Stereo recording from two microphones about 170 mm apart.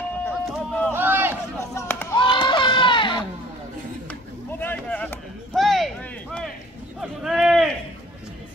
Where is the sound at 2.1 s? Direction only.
30° left (ahead or behind).